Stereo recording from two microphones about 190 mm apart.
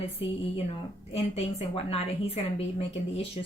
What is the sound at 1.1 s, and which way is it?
A woman's voice, 30° left (ahead or behind).